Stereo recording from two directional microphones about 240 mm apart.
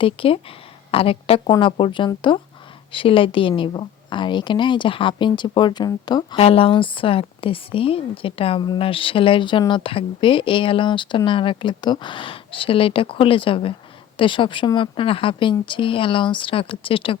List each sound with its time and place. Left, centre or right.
0.0 s a woman's voice: left